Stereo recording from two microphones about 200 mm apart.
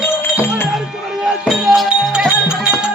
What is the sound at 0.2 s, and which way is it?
Music, 10° left (ahead or behind).